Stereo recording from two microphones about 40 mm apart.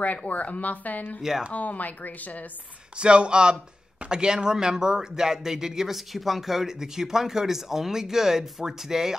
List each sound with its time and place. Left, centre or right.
0.3 s speech: left
3.0 s speech: right